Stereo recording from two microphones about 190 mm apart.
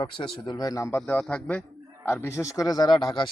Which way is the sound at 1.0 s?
5° left (ahead or behind).